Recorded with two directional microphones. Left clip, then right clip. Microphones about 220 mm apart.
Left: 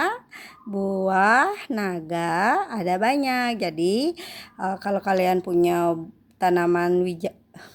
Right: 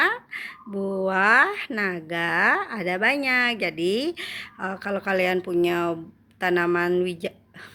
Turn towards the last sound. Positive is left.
turn(degrees=40)  # may be behind; listen again after turning